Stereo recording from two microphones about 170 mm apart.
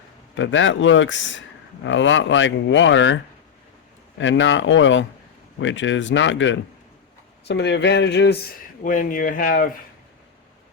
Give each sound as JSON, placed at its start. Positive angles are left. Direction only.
{"t": 0.3, "sound": "speech", "side_deg": 90}
{"t": 4.2, "sound": "speech", "side_deg": 90}
{"t": 8.8, "sound": "speech", "side_deg": 50}